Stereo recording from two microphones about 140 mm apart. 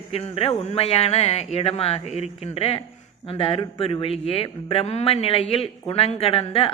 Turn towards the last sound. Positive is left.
turn(degrees=45)  # may be behind; listen again after turning